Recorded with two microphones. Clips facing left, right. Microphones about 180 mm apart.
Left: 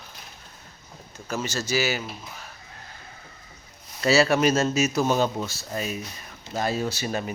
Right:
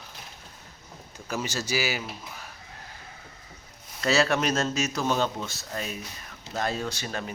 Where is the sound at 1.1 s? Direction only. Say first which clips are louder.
Left 2 dB; 15° right (ahead or behind).